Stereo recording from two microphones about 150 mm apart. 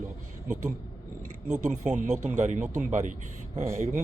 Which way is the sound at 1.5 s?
50° right (ahead or behind).